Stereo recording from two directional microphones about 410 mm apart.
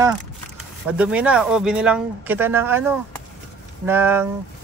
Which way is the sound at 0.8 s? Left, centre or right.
Centre.